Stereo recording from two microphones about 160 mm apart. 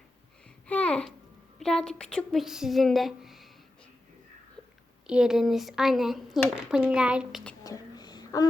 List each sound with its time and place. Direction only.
0.7 s babbling: 5° left (ahead or behind)
1.5 s speech: 5° left (ahead or behind)
5.0 s speech: 5° right (ahead or behind)
7.6 s a sound: 25° left (ahead or behind)